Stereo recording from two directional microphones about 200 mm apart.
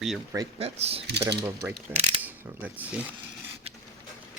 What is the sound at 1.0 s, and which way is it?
Mechanisms, 55° right (ahead or behind).